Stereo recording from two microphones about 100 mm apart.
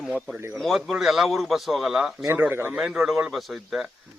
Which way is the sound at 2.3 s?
20° right (ahead or behind).